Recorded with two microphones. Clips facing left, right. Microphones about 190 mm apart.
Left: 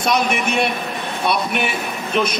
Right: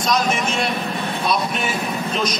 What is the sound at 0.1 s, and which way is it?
Speech, 60° left (ahead or behind).